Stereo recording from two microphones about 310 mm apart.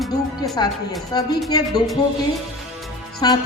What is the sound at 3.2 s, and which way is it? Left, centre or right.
Speech, centre.